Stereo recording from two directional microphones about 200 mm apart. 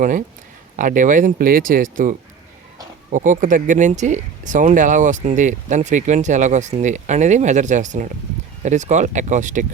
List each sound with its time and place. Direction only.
0.0 s speech: 40° right (ahead or behind)